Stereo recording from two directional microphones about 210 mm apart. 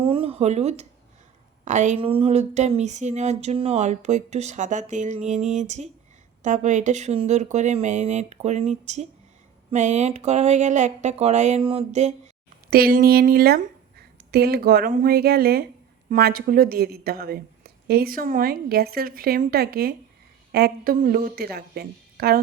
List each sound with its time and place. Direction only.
0.0 s speech: 25° right (ahead or behind)
12.7 s a woman's voice: 45° right (ahead or behind)